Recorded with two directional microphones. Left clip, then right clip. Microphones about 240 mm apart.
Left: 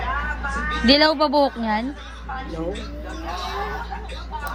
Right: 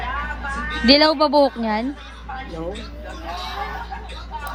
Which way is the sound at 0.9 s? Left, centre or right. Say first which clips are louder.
Right 2 dB; centre.